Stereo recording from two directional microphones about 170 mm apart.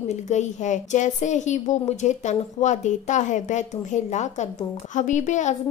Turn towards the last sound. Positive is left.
turn(degrees=45)  # may be behind; listen again after turning